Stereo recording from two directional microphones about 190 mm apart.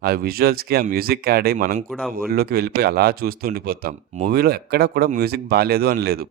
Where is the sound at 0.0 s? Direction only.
50° right (ahead or behind).